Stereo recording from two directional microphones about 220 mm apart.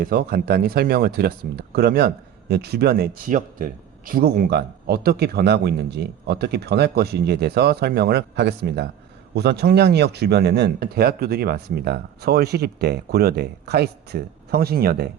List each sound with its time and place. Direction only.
0.0 s speech: 40° right (ahead or behind)